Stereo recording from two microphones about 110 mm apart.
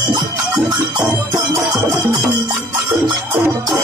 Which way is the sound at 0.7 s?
20° right (ahead or behind).